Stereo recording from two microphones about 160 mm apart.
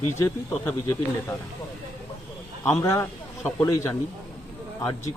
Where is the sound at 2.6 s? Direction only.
15° left (ahead or behind).